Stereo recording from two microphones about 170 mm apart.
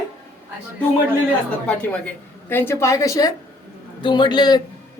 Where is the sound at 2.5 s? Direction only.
15° left (ahead or behind).